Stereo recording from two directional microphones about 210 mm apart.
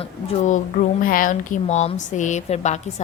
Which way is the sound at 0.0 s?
35° left (ahead or behind).